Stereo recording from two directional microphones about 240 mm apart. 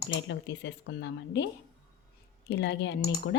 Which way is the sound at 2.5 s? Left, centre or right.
Left.